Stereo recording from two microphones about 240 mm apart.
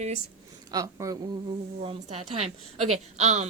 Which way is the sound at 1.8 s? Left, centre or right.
Right.